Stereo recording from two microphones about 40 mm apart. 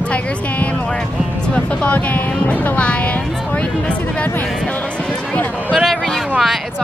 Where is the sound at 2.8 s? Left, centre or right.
Left.